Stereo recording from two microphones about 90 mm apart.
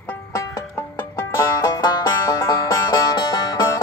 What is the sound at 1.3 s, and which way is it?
Music, 30° left (ahead or behind).